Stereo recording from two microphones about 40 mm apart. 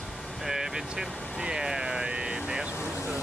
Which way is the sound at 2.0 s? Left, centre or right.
Right.